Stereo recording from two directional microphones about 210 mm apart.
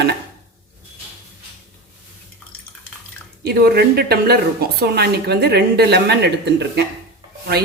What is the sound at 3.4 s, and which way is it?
A woman's voice, 50° right (ahead or behind).